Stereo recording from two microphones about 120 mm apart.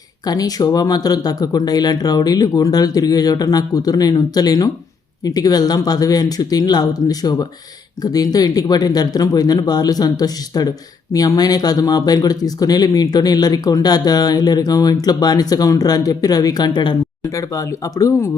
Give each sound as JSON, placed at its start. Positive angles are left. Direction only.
{"t": 0.3, "sound": "speech", "side_deg": 30}
{"t": 17.2, "sound": "speech", "side_deg": 25}